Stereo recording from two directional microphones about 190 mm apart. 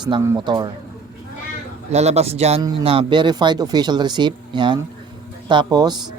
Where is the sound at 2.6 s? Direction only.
20° right (ahead or behind).